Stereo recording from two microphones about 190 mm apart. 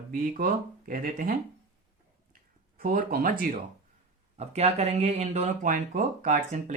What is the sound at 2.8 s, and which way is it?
Speech, 50° right (ahead or behind).